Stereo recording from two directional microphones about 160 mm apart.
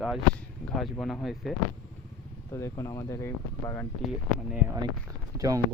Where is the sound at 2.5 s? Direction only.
20° left (ahead or behind).